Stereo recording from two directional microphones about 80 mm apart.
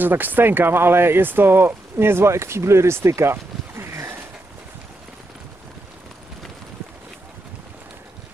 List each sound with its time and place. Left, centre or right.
0.0 s speech: right